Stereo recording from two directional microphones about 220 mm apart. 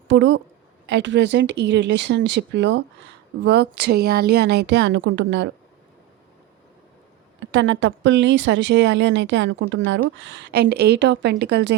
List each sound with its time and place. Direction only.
0.1 s a woman's voice: 60° right (ahead or behind)
7.3 s a woman's voice: 55° right (ahead or behind)